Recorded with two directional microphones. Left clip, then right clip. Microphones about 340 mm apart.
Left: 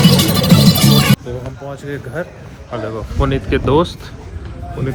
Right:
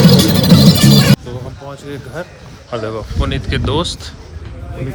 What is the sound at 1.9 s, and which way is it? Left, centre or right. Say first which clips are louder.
Speech: left 3 dB; centre.